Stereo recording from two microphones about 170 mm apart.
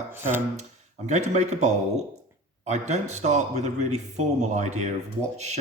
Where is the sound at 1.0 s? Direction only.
40° right (ahead or behind).